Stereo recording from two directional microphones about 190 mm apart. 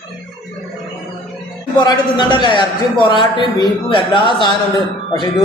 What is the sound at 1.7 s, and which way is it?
A man's voice, 25° left (ahead or behind).